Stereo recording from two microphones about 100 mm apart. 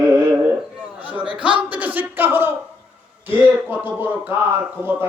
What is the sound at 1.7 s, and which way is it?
Speech, 15° right (ahead or behind).